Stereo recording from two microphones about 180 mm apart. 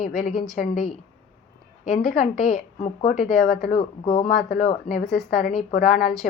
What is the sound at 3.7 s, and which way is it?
Speech, 30° left (ahead or behind).